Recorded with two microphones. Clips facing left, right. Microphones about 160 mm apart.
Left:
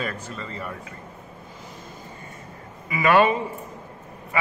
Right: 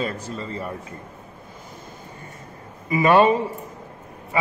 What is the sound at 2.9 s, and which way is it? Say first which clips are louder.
Speech: right 3 dB; 35° right (ahead or behind).